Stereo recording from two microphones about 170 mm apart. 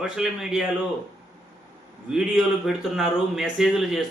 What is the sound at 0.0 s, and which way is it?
Speech, 5° right (ahead or behind).